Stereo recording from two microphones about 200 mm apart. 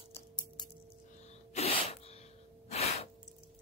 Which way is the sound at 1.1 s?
35° left (ahead or behind).